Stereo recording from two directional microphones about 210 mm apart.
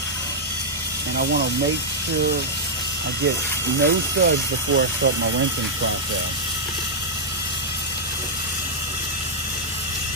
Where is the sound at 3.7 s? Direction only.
55° right (ahead or behind).